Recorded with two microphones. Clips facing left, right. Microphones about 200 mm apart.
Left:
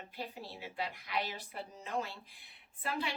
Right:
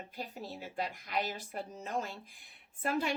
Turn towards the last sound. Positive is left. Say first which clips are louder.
# right 5 dB
turn(degrees=-45)  # may be behind; listen again after turning